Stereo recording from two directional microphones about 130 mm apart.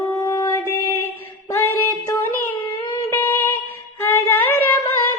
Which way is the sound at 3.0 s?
20° left (ahead or behind).